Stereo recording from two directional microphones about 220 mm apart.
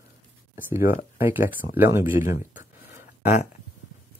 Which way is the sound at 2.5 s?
35° left (ahead or behind).